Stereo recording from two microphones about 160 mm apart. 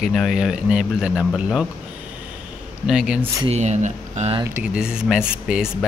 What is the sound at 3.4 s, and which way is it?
Speech, 45° right (ahead or behind).